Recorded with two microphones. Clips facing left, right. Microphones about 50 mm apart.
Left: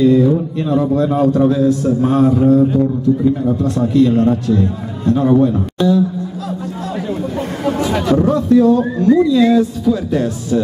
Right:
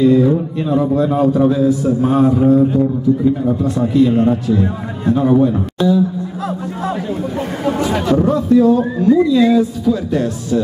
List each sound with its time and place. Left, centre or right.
0.0 s a man's voice: centre
6.4 s speech: right
7.1 s a man's voice: centre